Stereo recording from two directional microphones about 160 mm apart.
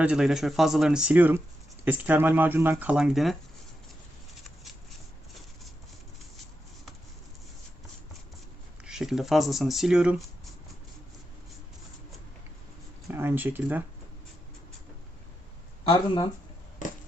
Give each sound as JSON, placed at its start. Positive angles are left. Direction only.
{"t": 0.0, "sound": "speech", "side_deg": -5}
{"t": 3.0, "sound": "speech", "side_deg": 0}
{"t": 8.8, "sound": "speech", "side_deg": -5}
{"t": 13.1, "sound": "speech", "side_deg": -15}
{"t": 15.8, "sound": "speech", "side_deg": 30}